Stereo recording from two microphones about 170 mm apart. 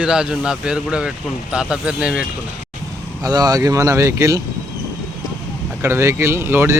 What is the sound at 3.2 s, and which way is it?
Speech, 20° right (ahead or behind).